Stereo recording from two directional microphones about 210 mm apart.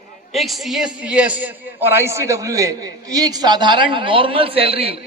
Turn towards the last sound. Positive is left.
turn(degrees=-25)  # may be behind; listen again after turning